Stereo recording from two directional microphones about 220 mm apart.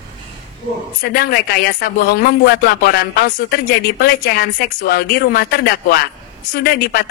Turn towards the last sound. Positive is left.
turn(degrees=45)  # may be behind; listen again after turning